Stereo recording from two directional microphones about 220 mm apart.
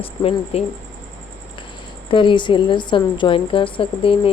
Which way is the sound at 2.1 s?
20° left (ahead or behind).